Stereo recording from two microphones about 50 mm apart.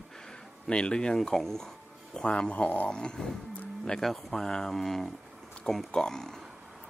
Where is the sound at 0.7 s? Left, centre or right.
Centre.